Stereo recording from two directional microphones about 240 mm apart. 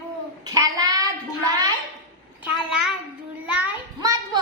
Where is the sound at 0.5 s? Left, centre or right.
Centre.